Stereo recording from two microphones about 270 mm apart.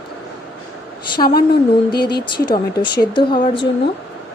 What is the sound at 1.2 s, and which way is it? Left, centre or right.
Speech, left.